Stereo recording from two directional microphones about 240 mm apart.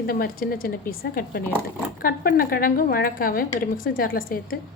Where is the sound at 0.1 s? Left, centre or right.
Left.